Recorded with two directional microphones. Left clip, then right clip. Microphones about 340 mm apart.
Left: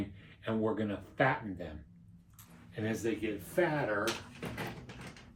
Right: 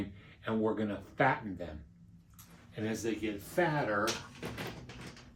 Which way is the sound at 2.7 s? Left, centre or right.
Centre.